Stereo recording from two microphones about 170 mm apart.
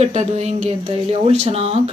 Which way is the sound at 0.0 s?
40° right (ahead or behind).